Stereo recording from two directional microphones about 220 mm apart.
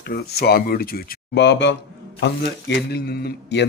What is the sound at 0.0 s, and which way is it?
A man's voice, 45° left (ahead or behind).